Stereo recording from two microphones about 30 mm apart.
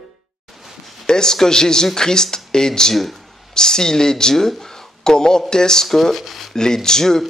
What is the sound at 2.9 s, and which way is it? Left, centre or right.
Speech, centre.